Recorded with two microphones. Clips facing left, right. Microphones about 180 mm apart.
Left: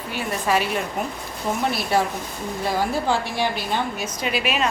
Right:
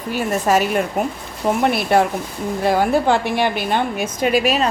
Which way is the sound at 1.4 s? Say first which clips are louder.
Right 7 dB; 60° right (ahead or behind).